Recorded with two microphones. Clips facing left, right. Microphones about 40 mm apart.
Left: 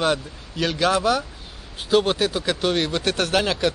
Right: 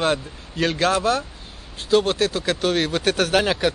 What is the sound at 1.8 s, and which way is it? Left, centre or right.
A man's voice, centre.